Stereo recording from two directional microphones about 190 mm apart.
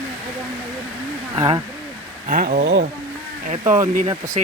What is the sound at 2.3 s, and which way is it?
Speech, 45° right (ahead or behind).